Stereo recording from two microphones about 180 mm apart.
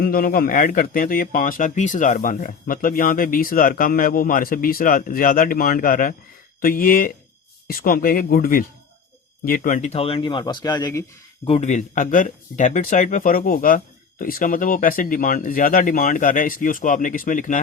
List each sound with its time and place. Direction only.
0.0 s speech: 55° left (ahead or behind); by 11.0 s 20° left (ahead or behind)
11.4 s speech: 35° left (ahead or behind)